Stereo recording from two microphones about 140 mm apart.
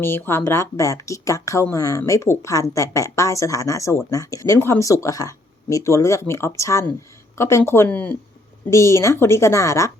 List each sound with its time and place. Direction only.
0.0 s speech: 15° left (ahead or behind)
8.7 s speech: 20° left (ahead or behind)